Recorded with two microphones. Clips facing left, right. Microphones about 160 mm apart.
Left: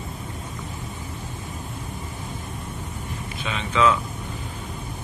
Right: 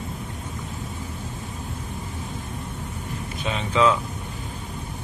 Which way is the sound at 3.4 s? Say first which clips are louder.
Right 1 dB; 35° right (ahead or behind).